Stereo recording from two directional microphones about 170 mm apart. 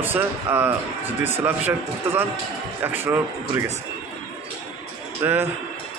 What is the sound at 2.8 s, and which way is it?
Speech, 10° right (ahead or behind).